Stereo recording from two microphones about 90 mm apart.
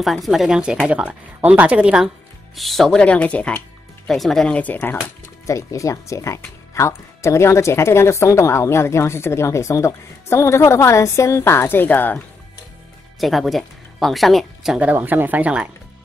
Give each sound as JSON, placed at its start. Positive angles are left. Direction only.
{"t": 0.0, "sound": "speech", "side_deg": 0}
{"t": 2.5, "sound": "speech", "side_deg": 0}
{"t": 3.0, "sound": "speech", "side_deg": 15}
{"t": 4.1, "sound": "speech", "side_deg": 5}
{"t": 5.5, "sound": "speech", "side_deg": 35}
{"t": 13.2, "sound": "speech", "side_deg": 0}
{"t": 14.8, "sound": "speech", "side_deg": -20}